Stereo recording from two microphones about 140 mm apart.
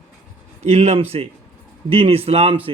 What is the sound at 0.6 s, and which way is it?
A man's voice, 50° right (ahead or behind).